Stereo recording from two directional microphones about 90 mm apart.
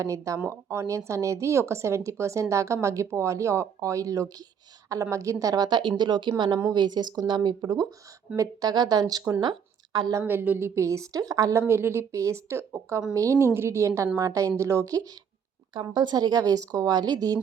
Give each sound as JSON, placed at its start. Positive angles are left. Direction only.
{"t": 0.0, "sound": "speech", "side_deg": -35}
{"t": 0.3, "sound": "a woman's voice", "side_deg": -20}
{"t": 0.7, "sound": "speech", "side_deg": -35}
{"t": 8.4, "sound": "speech", "side_deg": -45}
{"t": 9.4, "sound": "a sound", "side_deg": -55}
{"t": 10.2, "sound": "a woman's voice", "side_deg": -20}
{"t": 10.8, "sound": "speech", "side_deg": -35}
{"t": 11.7, "sound": "speech", "side_deg": -25}
{"t": 15.7, "sound": "speech", "side_deg": -55}